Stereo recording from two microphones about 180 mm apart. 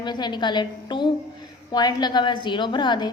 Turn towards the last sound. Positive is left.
turn(degrees=25)  # may be behind; listen again after turning